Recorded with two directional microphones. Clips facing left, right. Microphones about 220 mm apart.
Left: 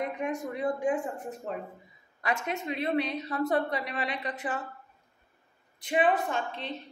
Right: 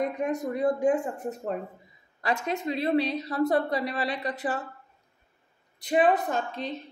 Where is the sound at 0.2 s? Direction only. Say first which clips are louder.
Right 4 dB; 40° right (ahead or behind).